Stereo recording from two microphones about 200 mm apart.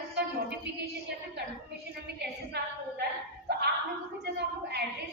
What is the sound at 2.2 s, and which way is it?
Speech, 55° right (ahead or behind).